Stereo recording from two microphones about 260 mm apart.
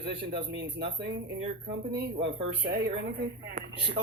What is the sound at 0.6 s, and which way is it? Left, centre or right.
Speech, right.